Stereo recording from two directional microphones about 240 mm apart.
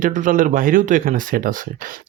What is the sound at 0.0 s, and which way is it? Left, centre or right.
Speech, right.